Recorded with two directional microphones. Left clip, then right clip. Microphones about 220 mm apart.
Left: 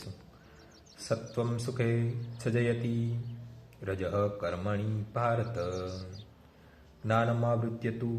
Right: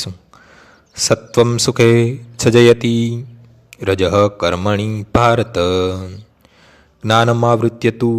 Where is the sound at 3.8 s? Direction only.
45° right (ahead or behind).